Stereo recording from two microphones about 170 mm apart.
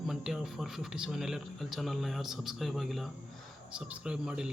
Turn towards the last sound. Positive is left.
turn(degrees=-5)  # may be behind; listen again after turning